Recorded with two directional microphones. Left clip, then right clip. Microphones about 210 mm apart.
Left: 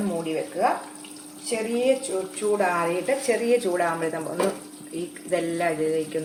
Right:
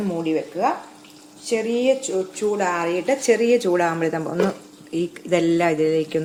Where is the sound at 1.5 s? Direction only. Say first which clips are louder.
Right 3 dB; 55° right (ahead or behind).